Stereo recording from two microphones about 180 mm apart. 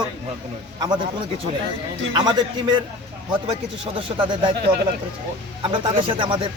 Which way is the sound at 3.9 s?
30° right (ahead or behind).